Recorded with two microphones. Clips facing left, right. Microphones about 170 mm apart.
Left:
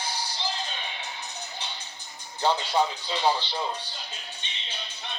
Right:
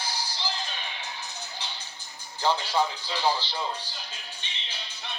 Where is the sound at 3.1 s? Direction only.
20° left (ahead or behind).